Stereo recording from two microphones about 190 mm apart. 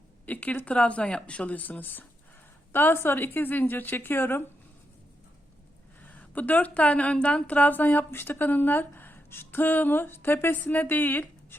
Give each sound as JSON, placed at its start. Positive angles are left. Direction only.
{"t": 0.3, "sound": "speech", "side_deg": 10}
{"t": 6.0, "sound": "speech", "side_deg": 10}